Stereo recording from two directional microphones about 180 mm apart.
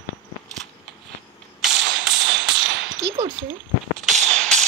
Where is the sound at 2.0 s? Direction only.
5° right (ahead or behind).